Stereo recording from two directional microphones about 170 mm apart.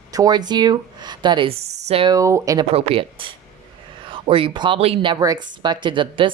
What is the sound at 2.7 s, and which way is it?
A woman's voice, 35° right (ahead or behind).